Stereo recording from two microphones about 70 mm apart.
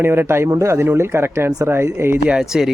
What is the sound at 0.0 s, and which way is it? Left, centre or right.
Speech, right.